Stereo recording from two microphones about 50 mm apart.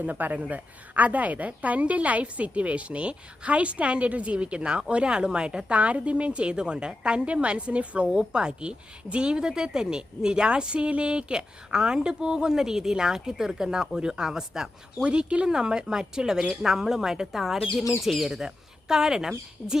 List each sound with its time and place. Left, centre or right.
0.0 s a woman's voice: right; by 18.3 s centre
18.3 s speech: centre